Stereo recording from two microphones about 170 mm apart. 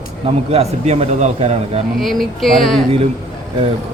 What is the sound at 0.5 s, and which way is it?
A man's voice, 40° right (ahead or behind).